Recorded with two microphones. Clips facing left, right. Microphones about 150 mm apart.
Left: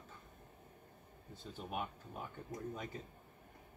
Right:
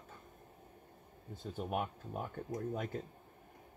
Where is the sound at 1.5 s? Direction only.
55° right (ahead or behind).